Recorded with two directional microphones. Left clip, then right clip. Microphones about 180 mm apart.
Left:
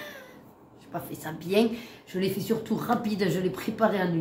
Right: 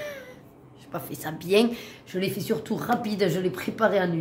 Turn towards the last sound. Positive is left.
turn(degrees=-50)  # may be behind; listen again after turning